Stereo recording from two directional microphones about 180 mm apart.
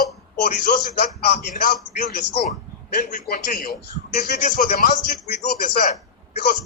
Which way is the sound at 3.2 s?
55° left (ahead or behind).